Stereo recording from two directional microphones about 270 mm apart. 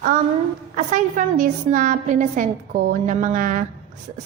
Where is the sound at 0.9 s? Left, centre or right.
Right.